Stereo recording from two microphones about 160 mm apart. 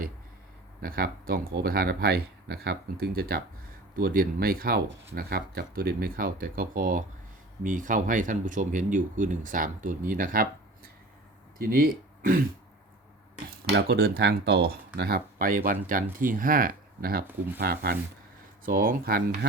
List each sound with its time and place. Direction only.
0.8 s speech: 65° right (ahead or behind)
11.6 s speech: 65° right (ahead or behind)
13.7 s speech: 85° right
18.6 s speech: 60° right (ahead or behind)